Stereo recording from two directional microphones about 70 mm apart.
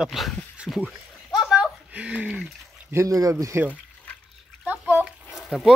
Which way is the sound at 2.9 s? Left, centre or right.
Right.